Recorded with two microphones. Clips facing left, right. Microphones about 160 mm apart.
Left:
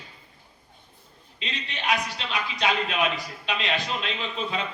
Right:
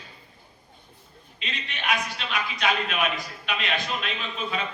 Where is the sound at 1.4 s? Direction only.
35° left (ahead or behind).